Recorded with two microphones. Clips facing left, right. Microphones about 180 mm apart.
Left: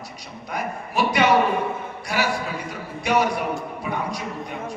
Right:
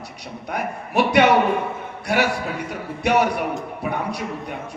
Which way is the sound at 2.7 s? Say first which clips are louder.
Right 2 dB; 60° right (ahead or behind).